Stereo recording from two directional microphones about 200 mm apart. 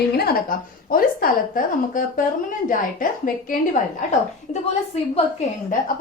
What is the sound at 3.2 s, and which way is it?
Speech, 40° left (ahead or behind).